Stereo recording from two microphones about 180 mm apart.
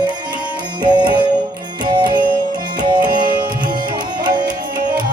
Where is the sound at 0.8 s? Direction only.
25° right (ahead or behind).